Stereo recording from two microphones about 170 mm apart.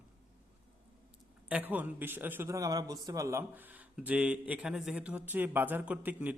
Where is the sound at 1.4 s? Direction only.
10° right (ahead or behind).